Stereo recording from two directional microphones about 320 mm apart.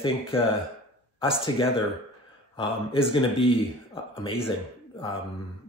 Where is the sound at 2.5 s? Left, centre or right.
Centre.